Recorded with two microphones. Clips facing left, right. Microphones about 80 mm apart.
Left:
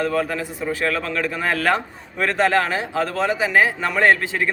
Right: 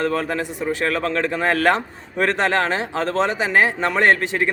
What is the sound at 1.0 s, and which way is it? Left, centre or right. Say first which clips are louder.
A man's voice: right 3 dB; right.